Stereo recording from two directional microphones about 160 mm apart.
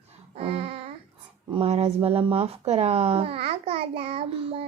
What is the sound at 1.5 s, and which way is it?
Speech, 40° right (ahead or behind).